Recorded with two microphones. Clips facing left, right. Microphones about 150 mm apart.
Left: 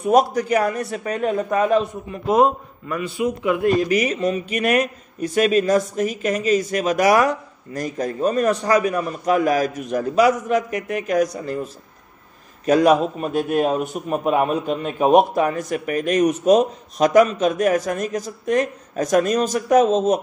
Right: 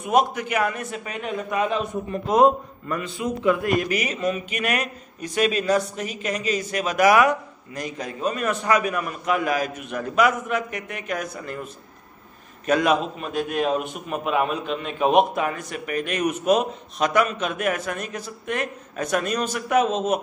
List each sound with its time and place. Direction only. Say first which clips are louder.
0.0 s speech: left 4 dB; 40° left (ahead or behind)
2.2 s a man's voice: left 1 dB; centre (ahead or behind)
3.6 s speech: left 5 dB; 40° left (ahead or behind)